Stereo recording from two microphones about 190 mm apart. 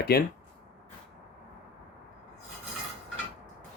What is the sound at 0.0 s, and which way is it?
Speech, 55° left (ahead or behind).